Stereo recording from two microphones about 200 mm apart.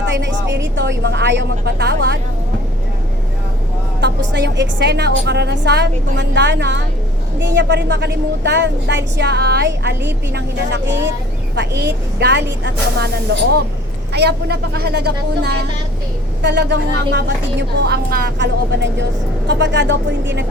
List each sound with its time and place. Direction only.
0.0 s a woman's voice: 65° right (ahead or behind)
4.0 s a woman's voice: 60° right (ahead or behind)
14.1 s a woman's voice: 55° right (ahead or behind)